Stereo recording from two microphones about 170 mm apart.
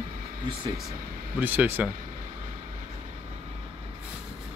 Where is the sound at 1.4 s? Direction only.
10° right (ahead or behind).